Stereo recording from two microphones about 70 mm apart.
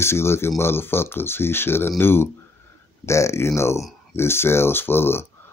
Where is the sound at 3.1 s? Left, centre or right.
Left.